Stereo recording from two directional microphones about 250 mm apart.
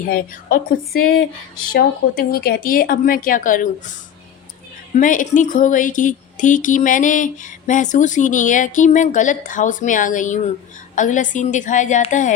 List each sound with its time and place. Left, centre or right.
0.1 s speech: left
4.9 s a woman's voice: left